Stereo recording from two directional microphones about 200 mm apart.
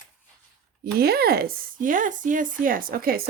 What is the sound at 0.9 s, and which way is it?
Speech, 50° right (ahead or behind).